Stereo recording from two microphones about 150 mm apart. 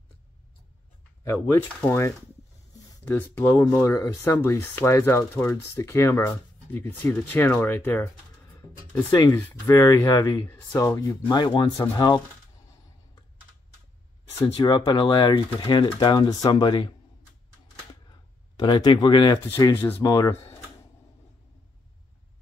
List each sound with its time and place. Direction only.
1.2 s speech: 15° left (ahead or behind)
9.3 s speech: 20° left (ahead or behind)
10.9 s speech: 25° left (ahead or behind)
14.6 s speech: 30° left (ahead or behind)
18.6 s speech: 30° left (ahead or behind)